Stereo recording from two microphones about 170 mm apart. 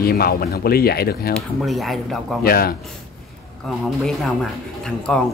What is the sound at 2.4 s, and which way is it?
Speech, 60° left (ahead or behind).